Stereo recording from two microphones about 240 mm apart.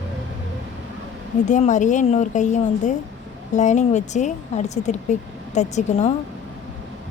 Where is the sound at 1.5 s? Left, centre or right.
Left.